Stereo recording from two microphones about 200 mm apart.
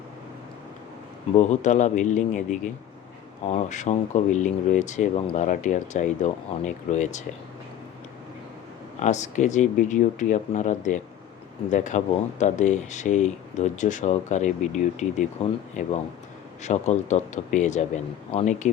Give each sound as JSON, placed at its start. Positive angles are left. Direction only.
{"t": 1.4, "sound": "speech", "side_deg": 35}
{"t": 9.0, "sound": "speech", "side_deg": 35}